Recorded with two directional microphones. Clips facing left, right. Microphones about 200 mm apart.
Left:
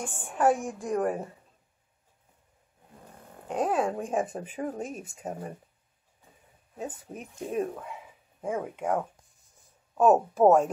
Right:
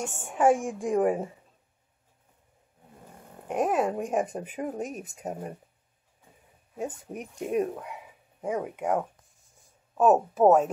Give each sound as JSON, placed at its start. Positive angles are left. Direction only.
{"t": 0.0, "sound": "speech", "side_deg": 0}
{"t": 0.7, "sound": "speech", "side_deg": -10}
{"t": 3.4, "sound": "speech", "side_deg": -15}
{"t": 3.8, "sound": "speech", "side_deg": -5}
{"t": 4.2, "sound": "speech", "side_deg": -15}
{"t": 4.6, "sound": "speech", "side_deg": -5}
{"t": 6.8, "sound": "speech", "side_deg": -15}
{"t": 7.9, "sound": "dog", "side_deg": -5}
{"t": 8.6, "sound": "speech", "side_deg": -5}